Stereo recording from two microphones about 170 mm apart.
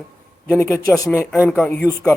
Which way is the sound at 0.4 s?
15° left (ahead or behind).